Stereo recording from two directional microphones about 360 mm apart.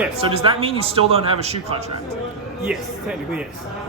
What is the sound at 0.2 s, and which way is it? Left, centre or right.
A man's voice, centre.